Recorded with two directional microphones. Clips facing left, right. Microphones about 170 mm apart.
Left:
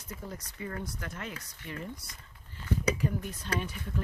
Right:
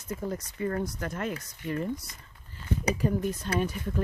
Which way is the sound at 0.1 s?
50° right (ahead or behind).